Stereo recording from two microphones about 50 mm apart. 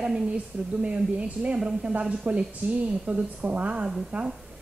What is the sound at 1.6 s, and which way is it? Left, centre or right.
A woman's voice, centre.